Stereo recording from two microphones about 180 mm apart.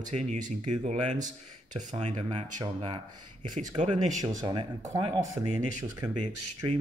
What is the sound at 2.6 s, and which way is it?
Speech, 25° right (ahead or behind).